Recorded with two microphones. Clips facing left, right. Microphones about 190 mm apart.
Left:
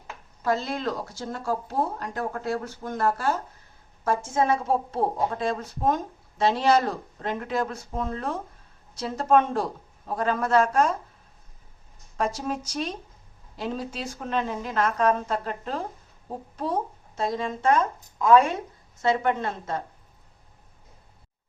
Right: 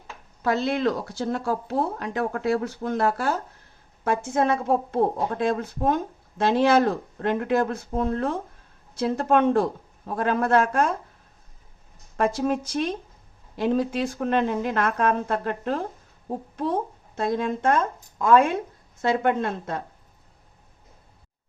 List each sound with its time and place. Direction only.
0.4 s speech: 65° right (ahead or behind)
12.1 s speech: 55° right (ahead or behind)
17.2 s speech: 55° right (ahead or behind)